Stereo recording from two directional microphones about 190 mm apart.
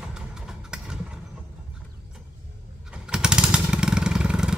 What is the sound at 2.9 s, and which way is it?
Motorcycle, 5° right (ahead or behind).